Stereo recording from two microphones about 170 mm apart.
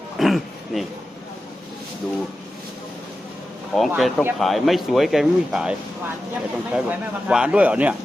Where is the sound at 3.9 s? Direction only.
Centre (ahead or behind).